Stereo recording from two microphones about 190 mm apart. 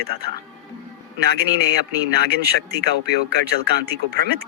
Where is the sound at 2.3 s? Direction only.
55° right (ahead or behind).